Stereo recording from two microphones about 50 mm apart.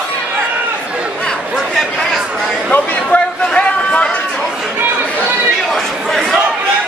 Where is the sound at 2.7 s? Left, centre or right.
Left.